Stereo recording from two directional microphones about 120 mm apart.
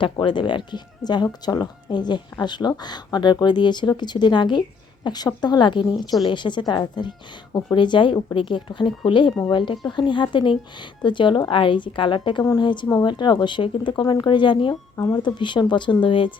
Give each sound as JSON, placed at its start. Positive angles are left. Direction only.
{"t": 0.0, "sound": "a woman's voice", "side_deg": 40}
{"t": 14.9, "sound": "speech", "side_deg": 25}
{"t": 15.2, "sound": "speech", "side_deg": 40}